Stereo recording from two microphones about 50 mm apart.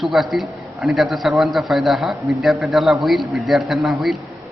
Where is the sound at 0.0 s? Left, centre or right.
Centre.